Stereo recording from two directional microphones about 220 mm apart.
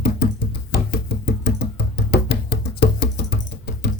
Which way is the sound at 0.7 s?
50° left (ahead or behind).